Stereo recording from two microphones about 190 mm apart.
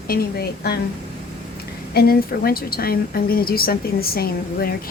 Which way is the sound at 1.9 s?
55° left (ahead or behind).